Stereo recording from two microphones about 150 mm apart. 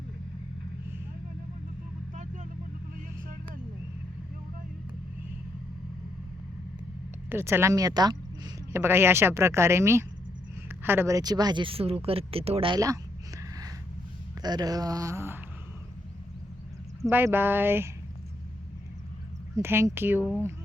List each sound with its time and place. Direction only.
2.1 s vehicle: 55° right (ahead or behind)
7.3 s speech: 15° right (ahead or behind)
8.8 s speech: 15° right (ahead or behind); by 12.8 s 35° right (ahead or behind)
14.4 s a sound: 25° right (ahead or behind)
17.0 s speech: 15° right (ahead or behind)
19.5 s speech: 15° right (ahead or behind)